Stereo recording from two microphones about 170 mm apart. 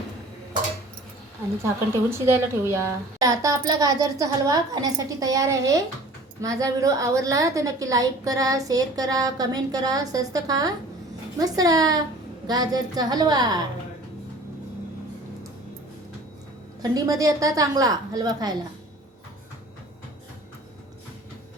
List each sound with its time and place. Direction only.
1.6 s a woman's voice: 15° right (ahead or behind)
16.8 s a woman's voice: 20° right (ahead or behind)